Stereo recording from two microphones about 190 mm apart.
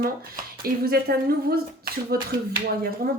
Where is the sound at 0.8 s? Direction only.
55° right (ahead or behind).